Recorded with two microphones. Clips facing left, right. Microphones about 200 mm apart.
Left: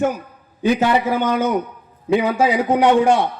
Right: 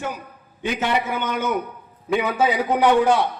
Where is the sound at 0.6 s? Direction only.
35° left (ahead or behind).